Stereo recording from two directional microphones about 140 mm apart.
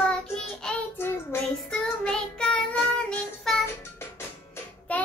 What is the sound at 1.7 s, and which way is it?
Child singing, 5° left (ahead or behind).